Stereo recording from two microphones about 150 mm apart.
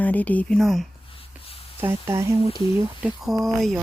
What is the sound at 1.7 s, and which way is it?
Speech, 15° right (ahead or behind).